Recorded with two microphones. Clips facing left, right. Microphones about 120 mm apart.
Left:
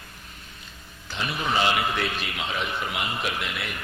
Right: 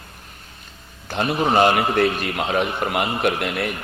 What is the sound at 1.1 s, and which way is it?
Speech, 55° right (ahead or behind).